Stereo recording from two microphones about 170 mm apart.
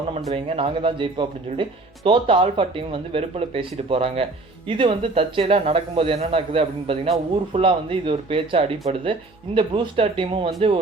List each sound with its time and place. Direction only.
0.3 s a man's voice: 35° right (ahead or behind)